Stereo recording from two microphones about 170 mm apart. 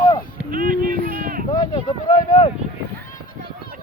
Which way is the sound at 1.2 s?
55° right (ahead or behind).